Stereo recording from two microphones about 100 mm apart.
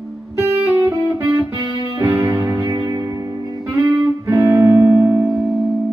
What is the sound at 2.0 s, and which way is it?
Music, 20° right (ahead or behind).